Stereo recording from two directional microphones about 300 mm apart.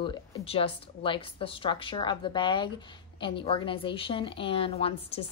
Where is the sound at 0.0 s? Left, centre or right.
Centre.